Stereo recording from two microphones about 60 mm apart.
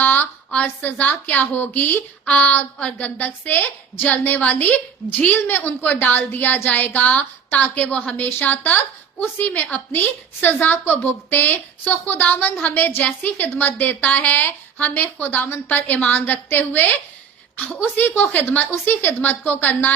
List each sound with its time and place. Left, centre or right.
0.0 s a sound: left
0.8 s a woman's voice: left
17.9 s a woman's voice: left